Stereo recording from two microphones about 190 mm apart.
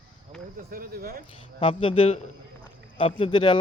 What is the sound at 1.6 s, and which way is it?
Speech, 25° left (ahead or behind).